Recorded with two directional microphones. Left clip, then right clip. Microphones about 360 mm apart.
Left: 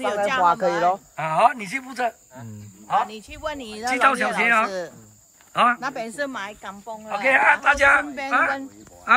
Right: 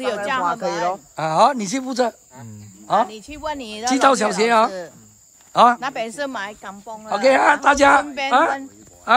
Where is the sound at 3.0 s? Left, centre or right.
Right.